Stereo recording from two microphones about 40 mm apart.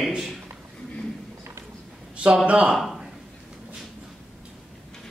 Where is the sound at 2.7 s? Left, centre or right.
Centre.